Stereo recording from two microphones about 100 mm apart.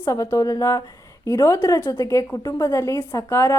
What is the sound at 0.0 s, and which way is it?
A woman's voice, 30° left (ahead or behind).